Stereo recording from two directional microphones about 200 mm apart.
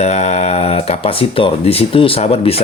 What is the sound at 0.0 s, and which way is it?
Speech, 35° left (ahead or behind).